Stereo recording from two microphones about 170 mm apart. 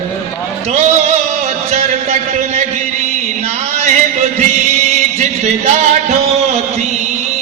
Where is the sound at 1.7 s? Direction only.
40° right (ahead or behind).